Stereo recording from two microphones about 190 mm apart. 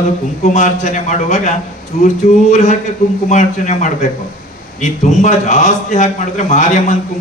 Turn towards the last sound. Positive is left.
turn(degrees=40)  # may be behind; listen again after turning